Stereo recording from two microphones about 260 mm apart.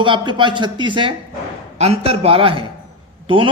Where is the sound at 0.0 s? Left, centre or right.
Centre.